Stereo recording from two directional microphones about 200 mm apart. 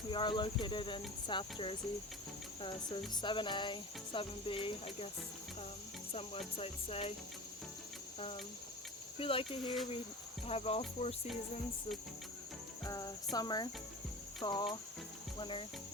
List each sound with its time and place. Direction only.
0.1 s cricket: 25° left (ahead or behind)
6.6 s cricket: 30° left (ahead or behind)
9.1 s cricket: 25° left (ahead or behind)
12.9 s cricket: 20° left (ahead or behind)